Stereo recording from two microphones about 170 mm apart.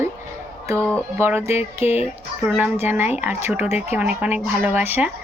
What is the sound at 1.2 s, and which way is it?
Speech, 15° right (ahead or behind).